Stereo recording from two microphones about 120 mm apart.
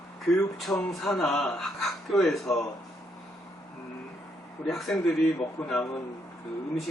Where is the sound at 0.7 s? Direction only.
20° left (ahead or behind).